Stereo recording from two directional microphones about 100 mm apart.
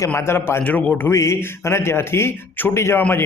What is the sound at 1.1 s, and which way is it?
A man's voice, 30° left (ahead or behind).